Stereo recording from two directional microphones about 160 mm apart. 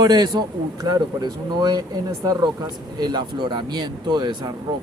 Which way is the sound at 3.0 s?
25° right (ahead or behind).